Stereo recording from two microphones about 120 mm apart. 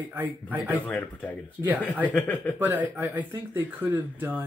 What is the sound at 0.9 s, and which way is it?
Speech, 10° left (ahead or behind).